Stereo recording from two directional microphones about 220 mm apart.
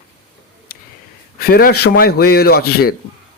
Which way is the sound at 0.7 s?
45° left (ahead or behind).